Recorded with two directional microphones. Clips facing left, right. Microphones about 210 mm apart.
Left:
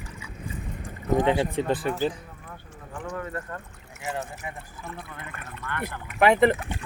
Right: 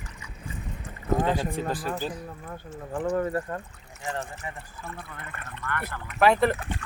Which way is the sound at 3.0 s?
40° right (ahead or behind).